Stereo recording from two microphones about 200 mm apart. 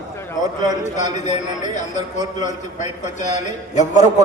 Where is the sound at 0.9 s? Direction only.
35° left (ahead or behind).